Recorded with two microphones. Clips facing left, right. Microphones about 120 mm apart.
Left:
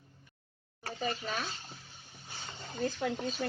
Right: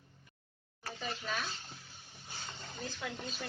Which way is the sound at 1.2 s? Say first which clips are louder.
Left 2 dB; 35° left (ahead or behind).